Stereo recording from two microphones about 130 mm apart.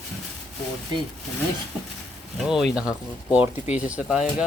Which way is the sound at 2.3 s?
Centre (ahead or behind).